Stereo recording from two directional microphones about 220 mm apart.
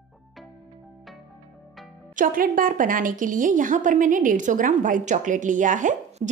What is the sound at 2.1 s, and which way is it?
A woman's voice, 40° right (ahead or behind).